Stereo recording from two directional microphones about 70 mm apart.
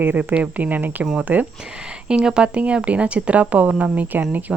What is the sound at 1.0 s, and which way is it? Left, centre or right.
Speech, centre.